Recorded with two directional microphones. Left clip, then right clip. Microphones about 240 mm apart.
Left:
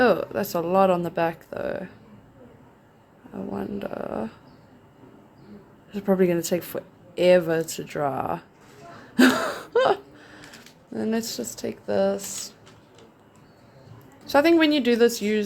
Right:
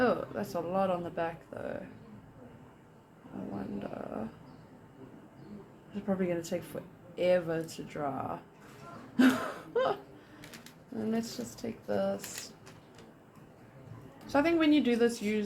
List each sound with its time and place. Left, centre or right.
0.0 s speech: left
3.8 s speech: left
5.9 s speech: left
14.3 s speech: left